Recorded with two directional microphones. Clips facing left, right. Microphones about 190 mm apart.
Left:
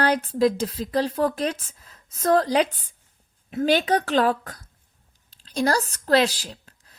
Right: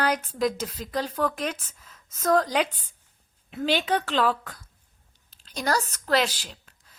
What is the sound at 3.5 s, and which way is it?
A woman's voice, 45° left (ahead or behind).